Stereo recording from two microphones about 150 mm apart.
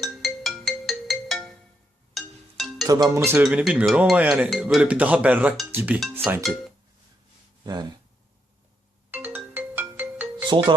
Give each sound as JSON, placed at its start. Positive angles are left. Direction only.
{"t": 0.0, "sound": "ringtone", "side_deg": 0}
{"t": 2.1, "sound": "music", "side_deg": 0}
{"t": 2.8, "sound": "speech", "side_deg": -25}
{"t": 3.2, "sound": "speech", "side_deg": -5}
{"t": 6.2, "sound": "speech", "side_deg": 0}
{"t": 7.6, "sound": "speech", "side_deg": -30}
{"t": 9.0, "sound": "ringtone", "side_deg": -15}